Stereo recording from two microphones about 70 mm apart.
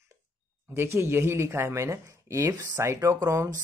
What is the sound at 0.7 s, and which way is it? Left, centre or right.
Speech, right.